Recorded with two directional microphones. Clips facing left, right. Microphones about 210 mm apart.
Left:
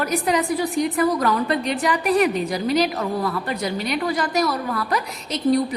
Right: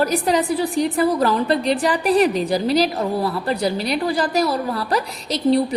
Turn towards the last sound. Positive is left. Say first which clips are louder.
# right 2 dB
turn(degrees=-30)  # may be behind; listen again after turning